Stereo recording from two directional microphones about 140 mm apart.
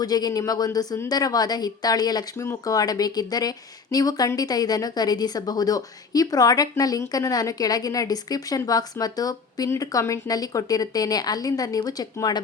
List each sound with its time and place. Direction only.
0.0 s speech: 30° left (ahead or behind)